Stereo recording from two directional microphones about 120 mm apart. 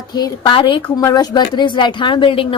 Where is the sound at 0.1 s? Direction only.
35° left (ahead or behind).